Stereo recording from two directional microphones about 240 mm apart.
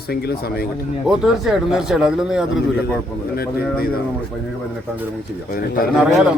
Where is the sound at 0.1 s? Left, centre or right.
Left.